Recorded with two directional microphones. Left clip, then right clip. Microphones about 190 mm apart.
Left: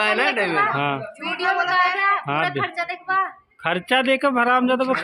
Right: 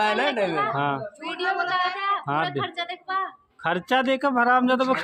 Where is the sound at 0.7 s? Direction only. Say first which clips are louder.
Left 2 dB; centre (ahead or behind).